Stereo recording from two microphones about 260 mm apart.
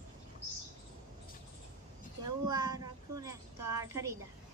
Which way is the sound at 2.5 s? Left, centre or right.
Centre.